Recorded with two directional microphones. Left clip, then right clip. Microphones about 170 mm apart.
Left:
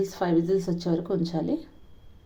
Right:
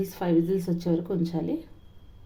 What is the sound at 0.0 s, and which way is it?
A woman's voice, 10° left (ahead or behind).